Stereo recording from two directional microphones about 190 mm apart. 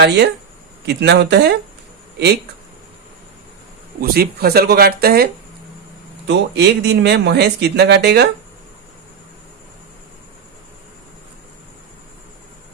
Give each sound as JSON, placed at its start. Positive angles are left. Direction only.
{"t": 0.9, "sound": "speech", "side_deg": -60}
{"t": 4.0, "sound": "speech", "side_deg": -55}